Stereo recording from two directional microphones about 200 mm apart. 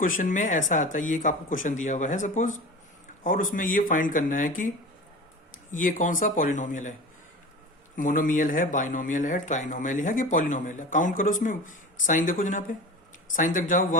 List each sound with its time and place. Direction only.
0.0 s speech: 40° left (ahead or behind)
5.7 s speech: 40° left (ahead or behind)
7.9 s speech: 40° left (ahead or behind)